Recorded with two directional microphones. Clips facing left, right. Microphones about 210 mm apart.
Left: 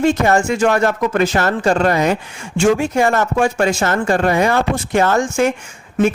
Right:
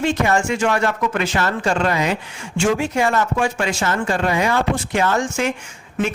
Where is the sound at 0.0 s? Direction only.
40° left (ahead or behind).